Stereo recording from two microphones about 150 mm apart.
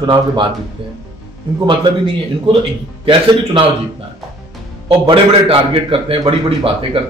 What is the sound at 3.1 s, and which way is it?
Speech, 35° right (ahead or behind).